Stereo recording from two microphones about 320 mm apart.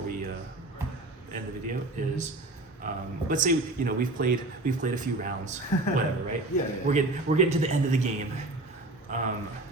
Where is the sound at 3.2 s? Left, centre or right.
Right.